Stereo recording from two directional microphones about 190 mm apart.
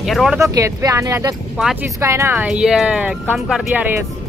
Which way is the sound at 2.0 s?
15° right (ahead or behind).